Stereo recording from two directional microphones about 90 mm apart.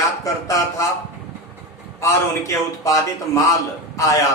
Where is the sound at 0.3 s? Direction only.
35° left (ahead or behind).